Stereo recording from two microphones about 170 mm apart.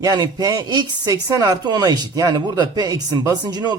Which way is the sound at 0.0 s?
25° right (ahead or behind).